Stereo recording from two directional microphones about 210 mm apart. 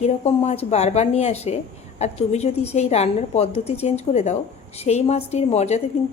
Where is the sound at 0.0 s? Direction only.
30° left (ahead or behind).